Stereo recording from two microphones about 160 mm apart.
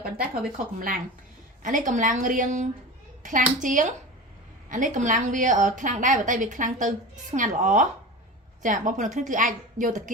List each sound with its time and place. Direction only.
1.6 s a woman's voice: 55° right (ahead or behind)